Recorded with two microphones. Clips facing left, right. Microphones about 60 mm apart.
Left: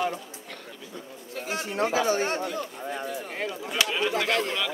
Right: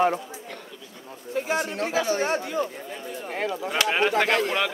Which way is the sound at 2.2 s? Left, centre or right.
Right.